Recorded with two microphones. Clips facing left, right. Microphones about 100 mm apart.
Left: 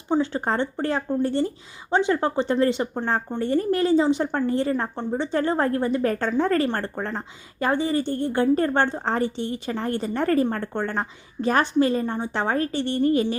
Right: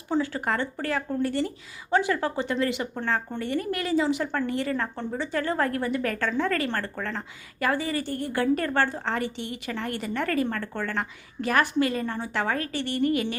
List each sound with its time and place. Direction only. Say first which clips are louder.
0.1 s a woman's voice: left 3 dB; 25° left (ahead or behind)